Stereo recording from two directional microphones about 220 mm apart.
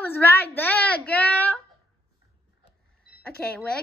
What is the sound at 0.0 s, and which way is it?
Child singing, 10° left (ahead or behind).